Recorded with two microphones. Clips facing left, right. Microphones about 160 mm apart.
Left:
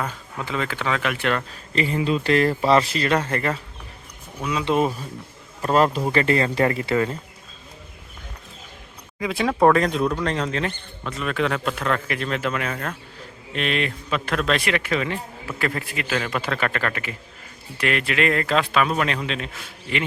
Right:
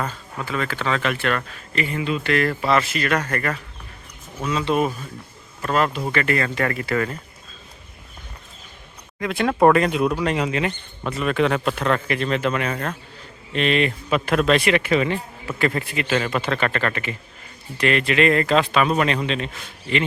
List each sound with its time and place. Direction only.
0.0 s speech: 15° left (ahead or behind)
1.7 s speech: 30° left (ahead or behind)
5.6 s speech: 35° left (ahead or behind)
9.2 s a man's voice: centre (ahead or behind)